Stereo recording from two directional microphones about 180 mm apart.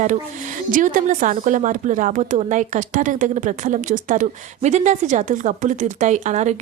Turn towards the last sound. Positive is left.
turn(degrees=-40)  # may be behind; listen again after turning